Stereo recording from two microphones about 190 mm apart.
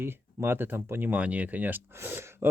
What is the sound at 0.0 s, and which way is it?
Speech, 10° right (ahead or behind).